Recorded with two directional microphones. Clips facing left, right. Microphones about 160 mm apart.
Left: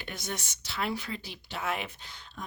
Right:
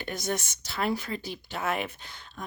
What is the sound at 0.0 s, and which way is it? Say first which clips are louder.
Speech: right 6 dB; 45° right (ahead or behind).